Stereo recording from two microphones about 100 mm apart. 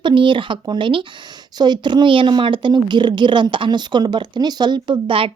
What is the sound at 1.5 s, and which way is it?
Speech, 45° right (ahead or behind).